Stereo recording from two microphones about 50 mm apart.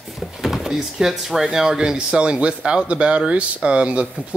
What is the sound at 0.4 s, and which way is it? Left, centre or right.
Speech, centre.